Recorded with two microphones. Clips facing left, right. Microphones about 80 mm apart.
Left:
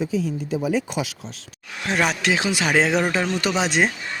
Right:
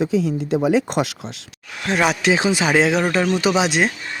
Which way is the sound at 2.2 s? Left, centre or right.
Right.